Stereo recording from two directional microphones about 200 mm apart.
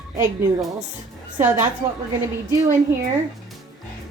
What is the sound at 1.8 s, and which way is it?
Speech, 20° right (ahead or behind).